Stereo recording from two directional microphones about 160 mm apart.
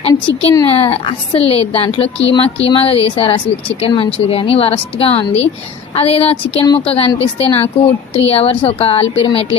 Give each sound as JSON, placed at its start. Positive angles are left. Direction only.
{"t": 0.1, "sound": "speech", "side_deg": 25}
{"t": 0.8, "sound": "a woman's voice", "side_deg": 35}